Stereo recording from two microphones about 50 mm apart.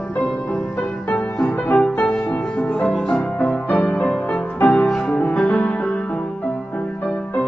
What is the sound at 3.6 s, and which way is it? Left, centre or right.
Music, left.